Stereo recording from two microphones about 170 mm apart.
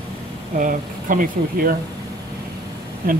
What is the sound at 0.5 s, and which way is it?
Speech, 50° right (ahead or behind).